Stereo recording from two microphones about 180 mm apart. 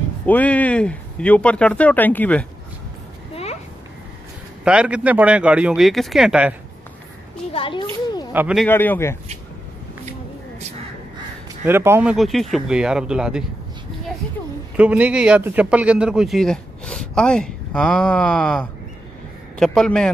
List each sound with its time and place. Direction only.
0.3 s speech: 10° left (ahead or behind)
4.6 s speech: 5° right (ahead or behind)
7.5 s a child's voice: 30° left (ahead or behind)
8.3 s a man's voice: 10° right (ahead or behind)
8.6 s speech: 10° left (ahead or behind)
11.6 s speech: 15° right (ahead or behind)
14.8 s a man's voice: 5° right (ahead or behind)